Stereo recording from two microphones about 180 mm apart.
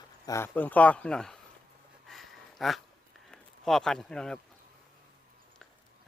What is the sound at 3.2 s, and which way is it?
Speech, centre (ahead or behind).